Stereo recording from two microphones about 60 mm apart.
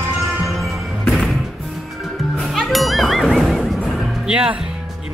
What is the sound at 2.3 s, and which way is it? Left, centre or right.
Music, centre.